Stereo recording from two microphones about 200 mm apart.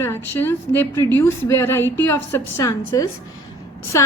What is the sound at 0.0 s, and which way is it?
A woman's voice, 10° left (ahead or behind).